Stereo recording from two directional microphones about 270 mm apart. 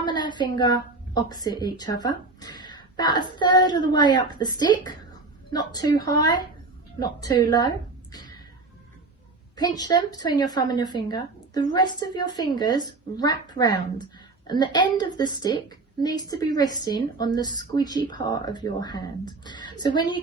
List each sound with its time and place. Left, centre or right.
0.0 s a woman's voice: centre
8.1 s a sound: centre
9.6 s a woman's voice: centre